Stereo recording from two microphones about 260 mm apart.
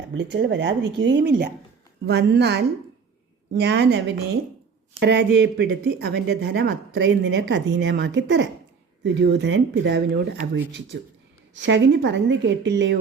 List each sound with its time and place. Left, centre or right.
0.1 s speech: right